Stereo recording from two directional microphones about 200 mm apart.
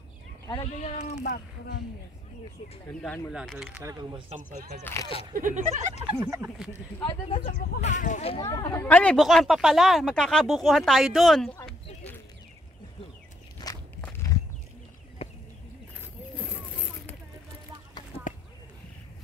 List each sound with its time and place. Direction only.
0.7 s speech: 35° left (ahead or behind)
1.2 s speech: 50° left (ahead or behind)
2.9 s speech: 5° left (ahead or behind)
4.3 s speech: 35° right (ahead or behind)
4.9 s speech: 10° left (ahead or behind)
5.3 s speech: 40° right (ahead or behind)
6.0 s speech: 15° right (ahead or behind)
7.1 s speech: 25° left (ahead or behind)
7.4 s speech: 40° left (ahead or behind)
8.5 s speech: 20° left (ahead or behind); by 11.5 s centre (ahead or behind)
13.6 s walk: 20° left (ahead or behind)
15.2 s a sound: 30° left (ahead or behind)